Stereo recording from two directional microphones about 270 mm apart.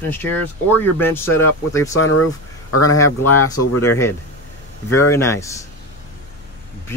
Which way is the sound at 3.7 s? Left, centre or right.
Left.